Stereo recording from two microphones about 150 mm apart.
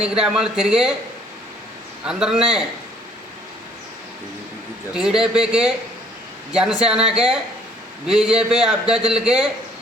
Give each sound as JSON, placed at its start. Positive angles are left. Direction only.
{"t": 0.0, "sound": "a man's voice", "side_deg": -5}
{"t": 2.0, "sound": "a man's voice", "side_deg": -5}
{"t": 4.9, "sound": "a man's voice", "side_deg": -5}